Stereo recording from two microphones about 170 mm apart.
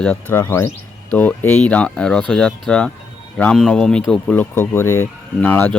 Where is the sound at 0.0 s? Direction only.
10° left (ahead or behind).